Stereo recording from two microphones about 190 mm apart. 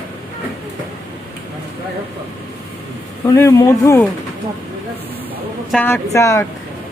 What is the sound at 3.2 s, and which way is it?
Speech, 15° left (ahead or behind).